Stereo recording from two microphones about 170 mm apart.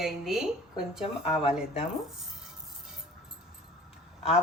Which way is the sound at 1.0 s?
35° left (ahead or behind).